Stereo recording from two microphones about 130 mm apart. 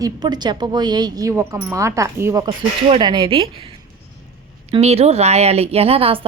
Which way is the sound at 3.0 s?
40° right (ahead or behind).